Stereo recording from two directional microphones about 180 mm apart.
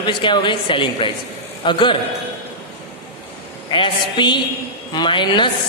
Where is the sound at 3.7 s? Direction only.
25° left (ahead or behind).